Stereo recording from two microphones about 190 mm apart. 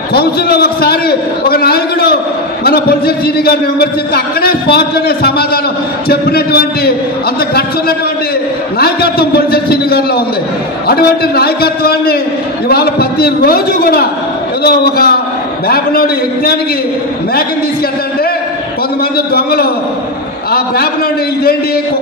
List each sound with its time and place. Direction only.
0.1 s a man's voice: 55° left (ahead or behind)
8.7 s a man's voice: 55° left (ahead or behind)
19.1 s a man's voice: 55° left (ahead or behind)